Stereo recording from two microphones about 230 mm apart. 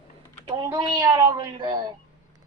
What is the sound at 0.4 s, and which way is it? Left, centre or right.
Speech, centre.